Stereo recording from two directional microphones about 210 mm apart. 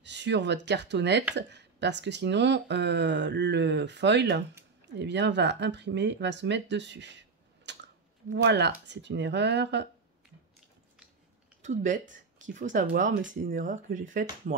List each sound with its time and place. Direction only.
0.0 s a sound: 55° right (ahead or behind)
0.7 s speech: 55° right (ahead or behind)
11.6 s speech: 35° right (ahead or behind)